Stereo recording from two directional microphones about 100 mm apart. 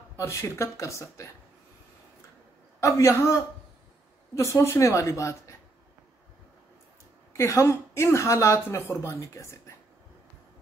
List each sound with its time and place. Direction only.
0.2 s speech: 30° left (ahead or behind)
2.8 s speech: 30° left (ahead or behind)
7.3 s speech: 30° left (ahead or behind)